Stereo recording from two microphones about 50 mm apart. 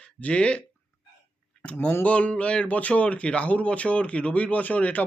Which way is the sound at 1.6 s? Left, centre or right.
Left.